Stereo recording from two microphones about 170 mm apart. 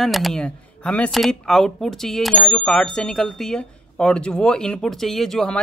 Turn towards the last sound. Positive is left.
turn(degrees=5)  # may be behind; listen again after turning